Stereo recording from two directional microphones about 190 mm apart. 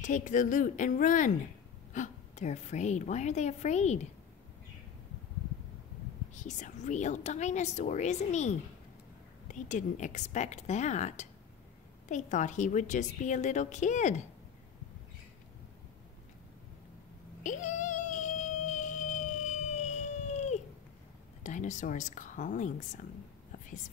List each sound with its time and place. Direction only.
0.0 s a woman's voice: 40° left (ahead or behind)
6.3 s a woman's voice: 40° left (ahead or behind)
17.4 s a sound: 40° left (ahead or behind)
21.4 s a woman's voice: 40° left (ahead or behind)